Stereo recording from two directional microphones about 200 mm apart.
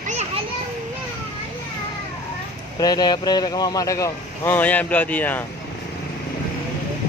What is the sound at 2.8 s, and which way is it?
Speech, 20° left (ahead or behind).